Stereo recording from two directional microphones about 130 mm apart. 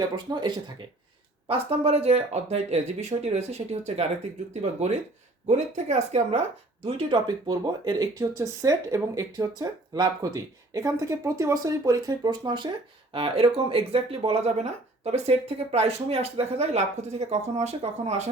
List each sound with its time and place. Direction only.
0.3 s speech: 35° right (ahead or behind)
1.5 s speech: 50° right (ahead or behind)
5.5 s speech: 65° right (ahead or behind)
6.8 s speech: 45° right (ahead or behind)
7.3 s speech: 30° right (ahead or behind)
13.1 s speech: 45° right (ahead or behind)